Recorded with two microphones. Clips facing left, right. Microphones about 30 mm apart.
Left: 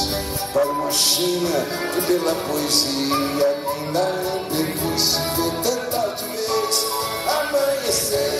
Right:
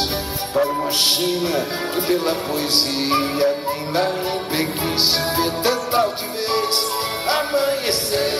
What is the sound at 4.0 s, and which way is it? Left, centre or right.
Music, right.